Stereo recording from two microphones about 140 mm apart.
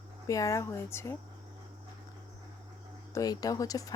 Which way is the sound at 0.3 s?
25° left (ahead or behind).